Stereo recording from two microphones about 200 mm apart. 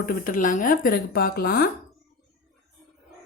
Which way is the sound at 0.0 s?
40° left (ahead or behind).